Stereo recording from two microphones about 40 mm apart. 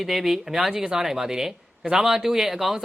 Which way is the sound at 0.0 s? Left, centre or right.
Centre.